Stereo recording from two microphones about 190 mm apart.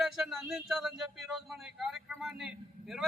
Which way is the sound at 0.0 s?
Centre (ahead or behind).